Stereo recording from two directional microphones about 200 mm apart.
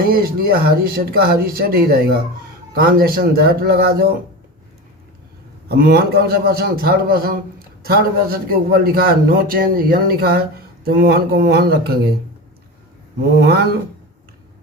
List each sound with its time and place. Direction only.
0.0 s a man's voice: 45° right (ahead or behind)
5.6 s a man's voice: 50° right (ahead or behind)
13.4 s a man's voice: 50° right (ahead or behind)